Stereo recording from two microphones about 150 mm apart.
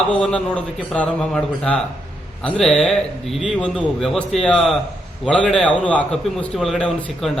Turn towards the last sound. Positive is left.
turn(degrees=0)  # may be behind; listen again after turning